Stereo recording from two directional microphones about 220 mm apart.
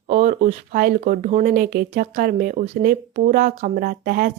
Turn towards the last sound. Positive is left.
turn(degrees=-40)  # may be behind; listen again after turning